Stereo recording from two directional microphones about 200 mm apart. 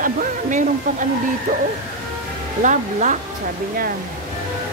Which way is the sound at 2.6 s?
40° right (ahead or behind).